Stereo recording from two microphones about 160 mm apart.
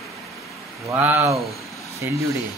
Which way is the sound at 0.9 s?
15° right (ahead or behind).